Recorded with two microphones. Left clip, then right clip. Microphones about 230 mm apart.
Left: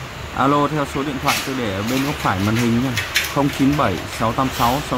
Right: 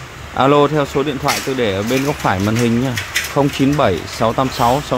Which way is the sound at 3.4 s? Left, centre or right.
Right.